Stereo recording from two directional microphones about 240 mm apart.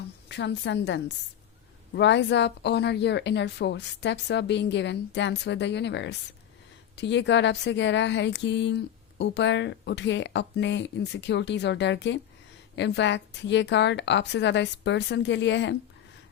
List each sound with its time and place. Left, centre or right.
0.3 s speech: left